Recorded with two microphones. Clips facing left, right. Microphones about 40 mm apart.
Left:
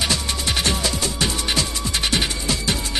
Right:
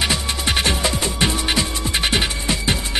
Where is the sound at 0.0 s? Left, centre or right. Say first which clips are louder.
Right 2 dB; right.